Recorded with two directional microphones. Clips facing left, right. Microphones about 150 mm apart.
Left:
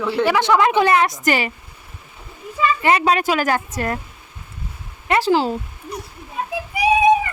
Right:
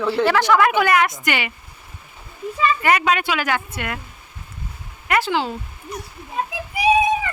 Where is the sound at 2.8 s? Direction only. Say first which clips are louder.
Left 4 dB; 30° left (ahead or behind).